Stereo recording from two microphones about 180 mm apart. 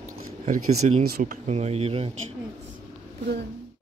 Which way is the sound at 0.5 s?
40° right (ahead or behind).